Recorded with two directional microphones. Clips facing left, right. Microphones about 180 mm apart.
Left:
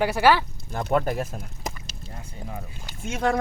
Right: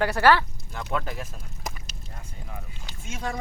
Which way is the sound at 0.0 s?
10° left (ahead or behind).